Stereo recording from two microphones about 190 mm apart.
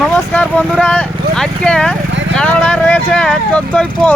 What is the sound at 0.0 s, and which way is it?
Speech, 5° left (ahead or behind).